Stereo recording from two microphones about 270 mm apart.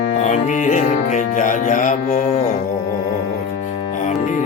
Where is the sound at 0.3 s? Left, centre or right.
Left.